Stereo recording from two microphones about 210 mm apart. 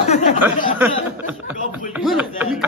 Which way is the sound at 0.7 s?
10° right (ahead or behind).